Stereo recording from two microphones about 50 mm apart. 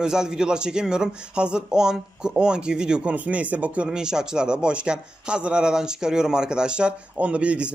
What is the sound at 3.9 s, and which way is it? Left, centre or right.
Speech, centre.